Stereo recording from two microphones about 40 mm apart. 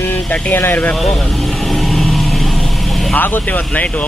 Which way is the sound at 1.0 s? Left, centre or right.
Centre.